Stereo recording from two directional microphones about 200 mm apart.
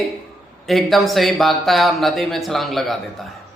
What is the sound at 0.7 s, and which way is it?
Speech, centre (ahead or behind).